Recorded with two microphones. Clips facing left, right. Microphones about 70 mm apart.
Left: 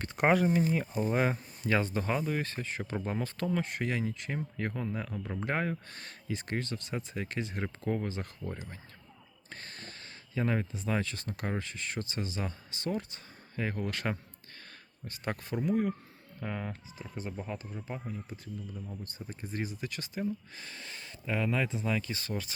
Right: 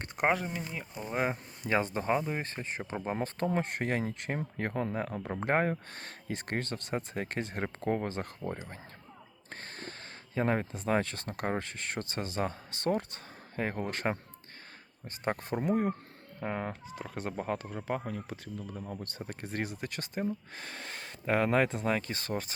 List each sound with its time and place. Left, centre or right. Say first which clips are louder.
0.2 s speech: left 4 dB; centre
1.6 s speech: even; right
9.5 s gasp: right 3 dB; right
10.3 s speech: right 2 dB; right
13.6 s speech: right 1 dB; right
16.4 s speech: right 3 dB; right
16.9 s speech: right 3 dB; right
17.8 s speech: right 7 dB; right